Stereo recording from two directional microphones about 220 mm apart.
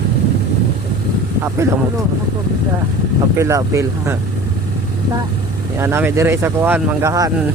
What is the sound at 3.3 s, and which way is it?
Speech, 15° right (ahead or behind).